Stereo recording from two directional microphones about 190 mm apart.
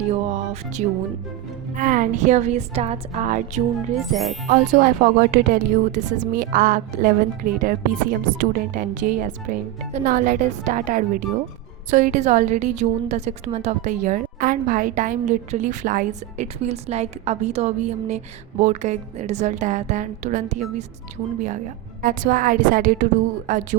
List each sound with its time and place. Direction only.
0.1 s music: 40° right (ahead or behind)
1.7 s a woman's voice: 40° right (ahead or behind)
3.9 s music: centre (ahead or behind)
4.4 s a woman's voice: 45° right (ahead or behind)
22.0 s a woman's voice: 45° right (ahead or behind)